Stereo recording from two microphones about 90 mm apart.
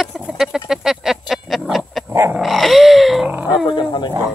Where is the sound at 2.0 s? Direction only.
30° right (ahead or behind).